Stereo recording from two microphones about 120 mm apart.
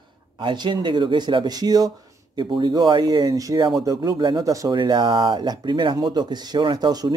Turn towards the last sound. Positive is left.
turn(degrees=-35)  # may be behind; listen again after turning